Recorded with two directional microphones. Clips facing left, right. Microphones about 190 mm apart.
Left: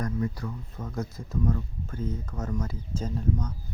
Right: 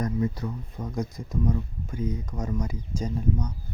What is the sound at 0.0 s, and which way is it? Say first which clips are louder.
Speech: right 3 dB; 20° right (ahead or behind).